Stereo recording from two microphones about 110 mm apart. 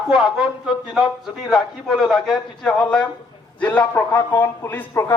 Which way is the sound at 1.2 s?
Centre (ahead or behind).